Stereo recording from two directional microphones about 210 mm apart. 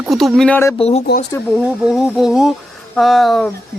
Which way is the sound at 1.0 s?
45° left (ahead or behind).